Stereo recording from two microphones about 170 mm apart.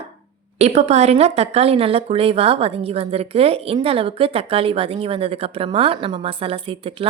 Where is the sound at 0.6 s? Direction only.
40° right (ahead or behind).